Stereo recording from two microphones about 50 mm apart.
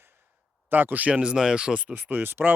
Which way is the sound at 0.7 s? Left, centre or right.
Right.